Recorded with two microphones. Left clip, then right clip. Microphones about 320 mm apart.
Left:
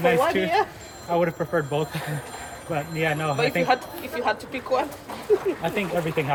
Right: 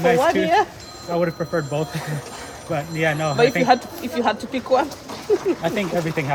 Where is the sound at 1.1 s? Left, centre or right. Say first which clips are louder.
Right 1 dB; centre.